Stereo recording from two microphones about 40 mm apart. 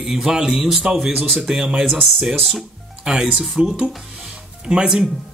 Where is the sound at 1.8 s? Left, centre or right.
Centre.